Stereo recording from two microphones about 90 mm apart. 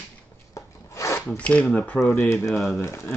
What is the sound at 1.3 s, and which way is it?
Speech, 15° left (ahead or behind).